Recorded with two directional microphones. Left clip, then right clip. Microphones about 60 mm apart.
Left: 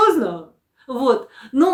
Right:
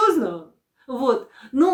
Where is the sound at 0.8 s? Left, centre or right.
Left.